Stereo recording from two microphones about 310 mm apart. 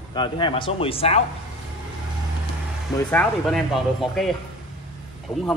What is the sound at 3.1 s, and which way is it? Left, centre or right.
Speech, centre.